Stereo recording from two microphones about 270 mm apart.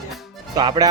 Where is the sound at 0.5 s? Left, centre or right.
Centre.